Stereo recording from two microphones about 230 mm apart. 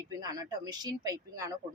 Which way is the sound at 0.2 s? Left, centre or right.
Centre.